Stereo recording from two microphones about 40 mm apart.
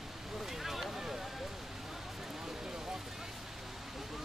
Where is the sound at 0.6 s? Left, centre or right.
Centre.